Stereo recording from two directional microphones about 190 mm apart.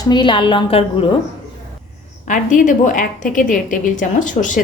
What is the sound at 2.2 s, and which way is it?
A woman's voice, 40° left (ahead or behind).